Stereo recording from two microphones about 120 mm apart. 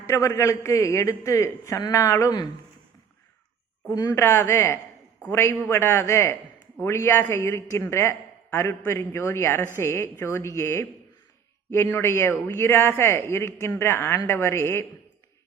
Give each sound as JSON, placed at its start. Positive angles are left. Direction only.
{"t": 0.0, "sound": "a man's voice", "side_deg": 25}
{"t": 4.1, "sound": "a man's voice", "side_deg": 20}